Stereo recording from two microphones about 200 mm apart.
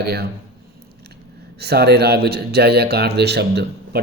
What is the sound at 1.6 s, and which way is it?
Speech, 55° right (ahead or behind).